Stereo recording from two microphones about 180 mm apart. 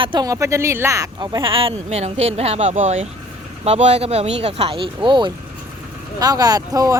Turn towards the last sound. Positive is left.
turn(degrees=-20)  # may be behind; listen again after turning